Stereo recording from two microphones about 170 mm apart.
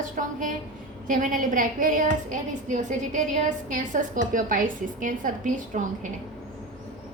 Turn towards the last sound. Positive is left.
turn(degrees=-50)  # may be behind; listen again after turning